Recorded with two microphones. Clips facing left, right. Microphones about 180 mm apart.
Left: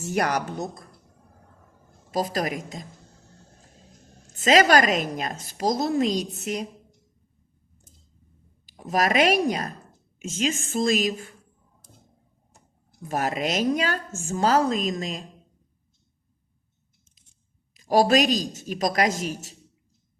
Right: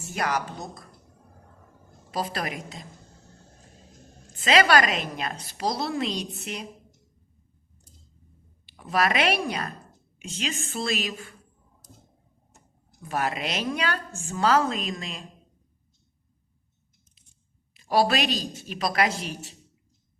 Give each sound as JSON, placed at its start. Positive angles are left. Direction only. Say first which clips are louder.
{"t": 0.0, "sound": "a woman's voice", "louder": "left 4 dB", "side_deg": 65}
{"t": 2.1, "sound": "a woman's voice", "louder": "left 4 dB", "side_deg": 40}
{"t": 4.4, "sound": "a woman's voice", "louder": "left 2 dB", "side_deg": 40}
{"t": 8.6, "sound": "a woman's voice", "louder": "left 1 dB", "side_deg": 40}
{"t": 13.1, "sound": "a woman's voice", "louder": "left 3 dB", "side_deg": 40}
{"t": 17.7, "sound": "a woman's voice", "louder": "left 4 dB", "side_deg": 45}